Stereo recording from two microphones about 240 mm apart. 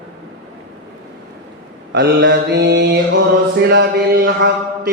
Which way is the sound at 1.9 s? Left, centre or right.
Right.